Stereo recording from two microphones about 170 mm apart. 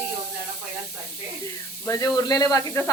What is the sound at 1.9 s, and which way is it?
Speech, 20° left (ahead or behind).